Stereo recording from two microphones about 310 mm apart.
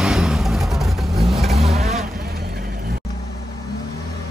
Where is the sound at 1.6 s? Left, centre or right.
Right.